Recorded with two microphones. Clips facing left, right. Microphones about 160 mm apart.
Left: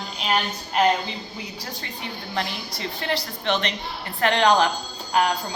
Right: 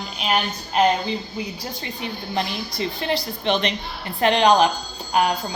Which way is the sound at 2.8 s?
15° right (ahead or behind).